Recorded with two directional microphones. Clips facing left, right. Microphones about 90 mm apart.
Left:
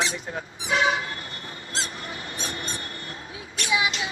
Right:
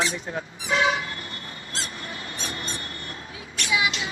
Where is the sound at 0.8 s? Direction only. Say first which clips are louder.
Even; 30° left (ahead or behind).